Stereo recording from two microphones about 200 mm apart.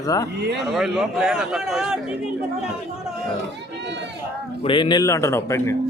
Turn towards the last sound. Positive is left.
turn(degrees=15)  # may be behind; listen again after turning